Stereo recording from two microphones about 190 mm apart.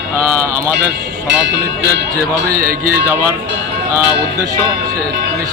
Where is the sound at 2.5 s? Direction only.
50° right (ahead or behind).